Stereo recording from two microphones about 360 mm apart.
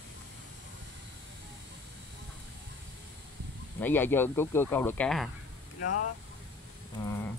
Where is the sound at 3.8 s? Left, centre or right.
Centre.